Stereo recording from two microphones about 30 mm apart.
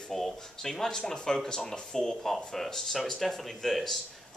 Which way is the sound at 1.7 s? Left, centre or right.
Left.